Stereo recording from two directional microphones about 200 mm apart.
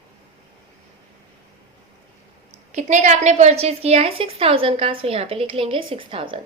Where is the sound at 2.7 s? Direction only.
35° right (ahead or behind).